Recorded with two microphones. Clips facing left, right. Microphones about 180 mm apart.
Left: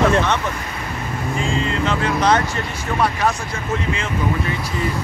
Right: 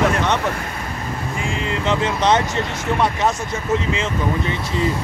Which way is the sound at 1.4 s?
20° right (ahead or behind).